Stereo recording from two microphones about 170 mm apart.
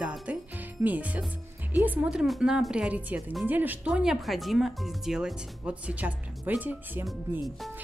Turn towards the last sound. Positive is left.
turn(degrees=-10)  # may be behind; listen again after turning